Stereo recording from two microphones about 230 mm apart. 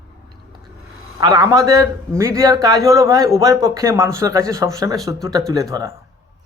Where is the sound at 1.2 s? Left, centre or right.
Centre.